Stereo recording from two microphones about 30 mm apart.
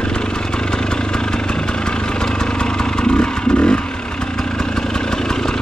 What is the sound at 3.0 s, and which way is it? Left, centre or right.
Vehicle, left.